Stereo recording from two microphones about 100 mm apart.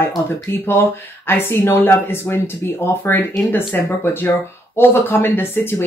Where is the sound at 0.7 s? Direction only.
25° left (ahead or behind).